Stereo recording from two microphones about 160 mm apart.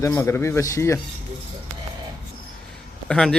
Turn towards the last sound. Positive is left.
turn(degrees=5)  # may be behind; listen again after turning